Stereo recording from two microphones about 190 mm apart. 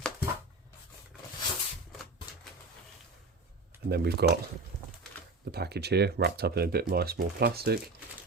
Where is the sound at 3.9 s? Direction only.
55° right (ahead or behind).